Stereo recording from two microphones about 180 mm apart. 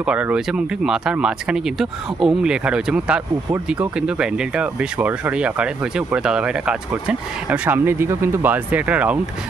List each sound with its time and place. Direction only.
0.0 s speech: 5° right (ahead or behind)